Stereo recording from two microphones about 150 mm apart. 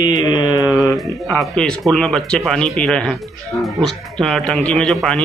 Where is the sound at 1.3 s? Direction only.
5° left (ahead or behind).